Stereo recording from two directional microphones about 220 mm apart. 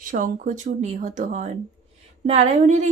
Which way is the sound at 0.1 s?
35° right (ahead or behind).